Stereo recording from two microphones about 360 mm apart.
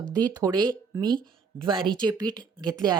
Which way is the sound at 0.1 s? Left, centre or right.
Centre.